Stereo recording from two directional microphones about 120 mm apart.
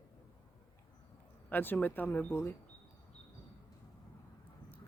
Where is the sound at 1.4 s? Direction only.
15° left (ahead or behind).